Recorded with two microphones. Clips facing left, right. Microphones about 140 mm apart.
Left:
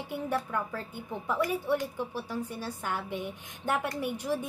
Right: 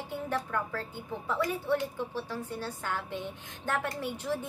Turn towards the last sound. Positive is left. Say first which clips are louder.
# left 2 dB
turn(degrees=15)  # may be behind; listen again after turning